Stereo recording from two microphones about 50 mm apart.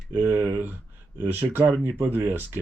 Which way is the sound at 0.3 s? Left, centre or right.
Right.